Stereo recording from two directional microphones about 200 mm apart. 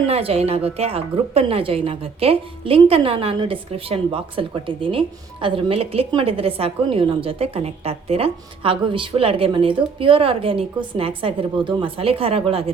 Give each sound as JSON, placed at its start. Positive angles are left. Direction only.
{"t": 0.1, "sound": "a woman's voice", "side_deg": -30}